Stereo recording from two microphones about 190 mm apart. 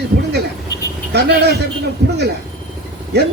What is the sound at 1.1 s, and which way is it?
A man's voice, 60° right (ahead or behind).